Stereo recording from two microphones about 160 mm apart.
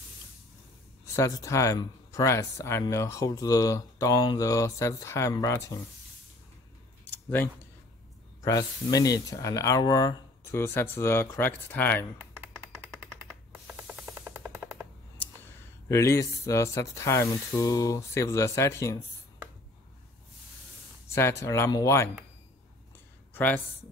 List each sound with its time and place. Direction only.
1.1 s speech: 20° left (ahead or behind)
8.4 s speech: 20° left (ahead or behind)
12.9 s a sound: 5° right (ahead or behind)
13.7 s music: 5° right (ahead or behind)
15.9 s speech: 20° left (ahead or behind)
21.1 s speech: 15° left (ahead or behind)
23.3 s speech: 10° left (ahead or behind)